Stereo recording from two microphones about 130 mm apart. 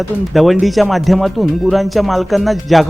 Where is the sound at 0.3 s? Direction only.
Centre (ahead or behind).